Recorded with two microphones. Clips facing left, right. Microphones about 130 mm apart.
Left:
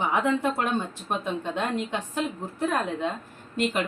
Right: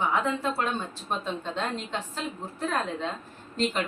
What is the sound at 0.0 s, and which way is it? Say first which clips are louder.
A woman's voice: left 3 dB; 20° left (ahead or behind).